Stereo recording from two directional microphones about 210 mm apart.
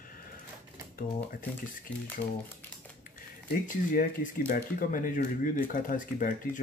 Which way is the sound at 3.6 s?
40° left (ahead or behind).